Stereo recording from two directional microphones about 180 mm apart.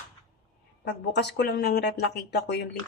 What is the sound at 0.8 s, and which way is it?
A woman's voice, 70° left (ahead or behind).